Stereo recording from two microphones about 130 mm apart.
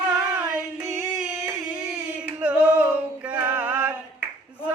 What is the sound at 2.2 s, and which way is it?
Music, 10° right (ahead or behind).